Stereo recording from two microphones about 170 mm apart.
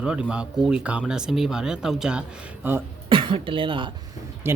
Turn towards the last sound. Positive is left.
turn(degrees=-30)  # may be behind; listen again after turning